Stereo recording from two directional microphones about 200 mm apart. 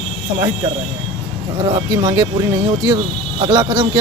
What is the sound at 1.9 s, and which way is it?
Speech, 20° right (ahead or behind).